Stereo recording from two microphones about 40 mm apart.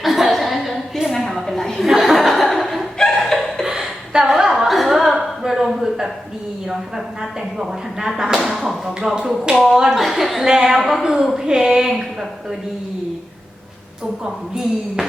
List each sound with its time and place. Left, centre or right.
0.0 s a sound: centre
1.9 s chuckle: centre
3.7 s a sound: centre
6.7 s speech: centre
10.0 s a woman's voice: centre
14.3 s speech: centre